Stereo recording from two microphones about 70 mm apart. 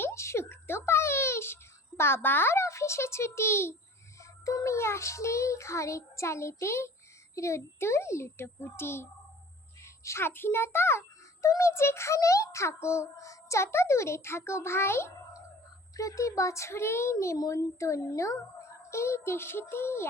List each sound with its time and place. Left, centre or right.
0.0 s a sound: left
2.0 s a child's voice: left
4.2 s a child's voice: left
16.0 s a child's voice: left
17.3 s a child's voice: left